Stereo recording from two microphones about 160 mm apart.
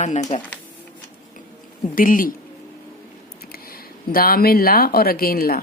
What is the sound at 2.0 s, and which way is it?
Speech, 60° left (ahead or behind).